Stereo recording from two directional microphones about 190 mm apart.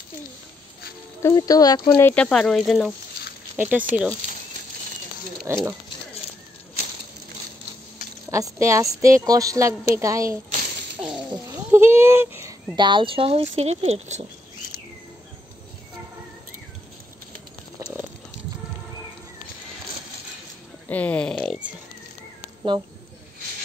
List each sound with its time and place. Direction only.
1.2 s speech: 20° left (ahead or behind); by 3.8 s 10° right (ahead or behind)
5.5 s a woman's voice: 15° right (ahead or behind)
8.3 s a woman's voice: 15° right (ahead or behind)
11.4 s a sound: 15° right (ahead or behind)
12.7 s speech: 25° right (ahead or behind)
20.9 s speech: 5° left (ahead or behind)